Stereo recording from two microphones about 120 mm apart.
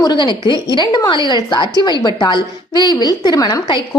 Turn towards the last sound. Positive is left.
turn(degrees=40)  # may be behind; listen again after turning